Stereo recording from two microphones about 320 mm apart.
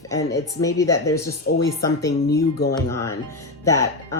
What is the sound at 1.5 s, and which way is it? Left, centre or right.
Speech, left.